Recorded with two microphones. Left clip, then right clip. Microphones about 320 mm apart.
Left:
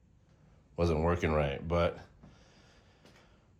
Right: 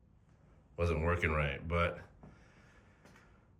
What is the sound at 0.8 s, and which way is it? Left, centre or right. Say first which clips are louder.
Speech: left 3 dB; centre.